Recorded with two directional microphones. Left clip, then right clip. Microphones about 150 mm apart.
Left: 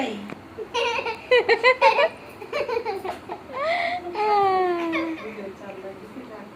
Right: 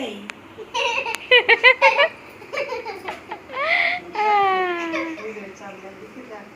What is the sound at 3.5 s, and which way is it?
Baby cry, 15° left (ahead or behind).